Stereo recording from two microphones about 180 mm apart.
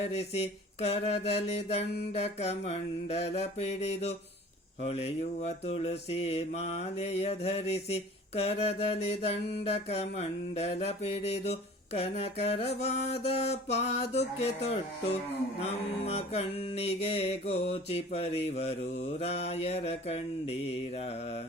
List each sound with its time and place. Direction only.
0.0 s mantra: 35° left (ahead or behind)